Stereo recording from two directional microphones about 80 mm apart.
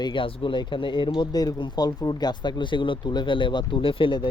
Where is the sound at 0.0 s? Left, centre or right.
Left.